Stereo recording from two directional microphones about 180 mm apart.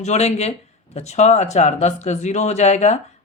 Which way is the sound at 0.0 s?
40° left (ahead or behind).